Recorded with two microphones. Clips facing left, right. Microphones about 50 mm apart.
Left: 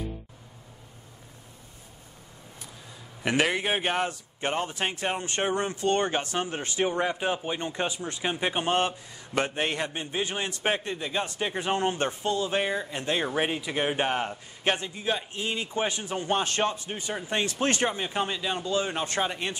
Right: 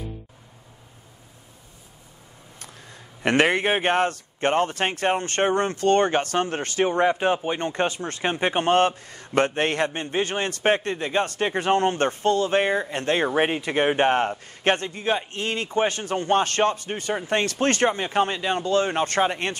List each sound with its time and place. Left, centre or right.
2.6 s a sound: right
3.4 s a man's voice: right
6.8 s a man's voice: right
8.2 s a man's voice: right
14.6 s a man's voice: right
17.8 s a man's voice: right
19.2 s speech: right